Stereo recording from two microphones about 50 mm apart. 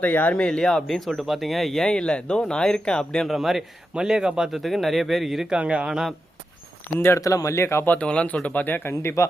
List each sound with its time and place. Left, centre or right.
0.0 s speech: left
0.4 s speech: centre
3.2 s speech: centre
4.4 s speech: centre
5.5 s speech: right
7.0 s a man's voice: left
7.9 s speech: left
8.6 s speech: left
8.9 s a man's voice: left